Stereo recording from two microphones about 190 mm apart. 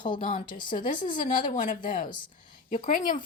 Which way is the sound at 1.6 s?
45° left (ahead or behind).